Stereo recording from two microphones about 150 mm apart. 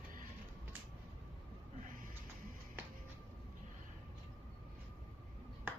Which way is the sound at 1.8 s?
65° right (ahead or behind).